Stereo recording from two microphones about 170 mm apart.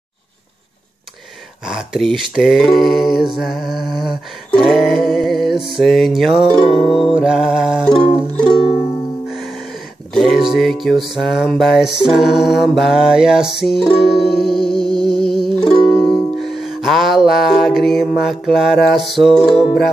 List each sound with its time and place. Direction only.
1.7 s music: 5° right (ahead or behind)
7.8 s music: 5° left (ahead or behind)
8.4 s music: 30° left (ahead or behind)
9.3 s music: centre (ahead or behind)
15.0 s a sound: centre (ahead or behind)
15.6 s music: 25° left (ahead or behind)
16.3 s music: centre (ahead or behind)